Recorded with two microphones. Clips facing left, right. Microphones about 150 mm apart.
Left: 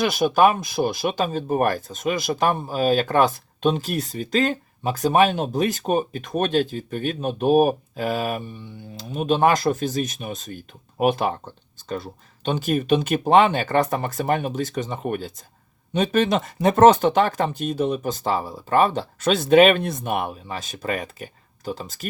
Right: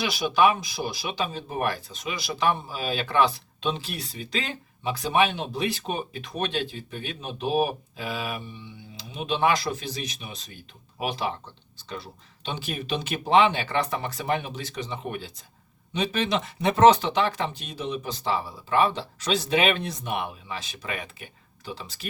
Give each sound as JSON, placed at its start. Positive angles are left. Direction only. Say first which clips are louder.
{"t": 0.0, "sound": "speech", "louder": "left 4 dB", "side_deg": 50}